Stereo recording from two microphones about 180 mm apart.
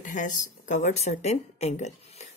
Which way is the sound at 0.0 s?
45° left (ahead or behind).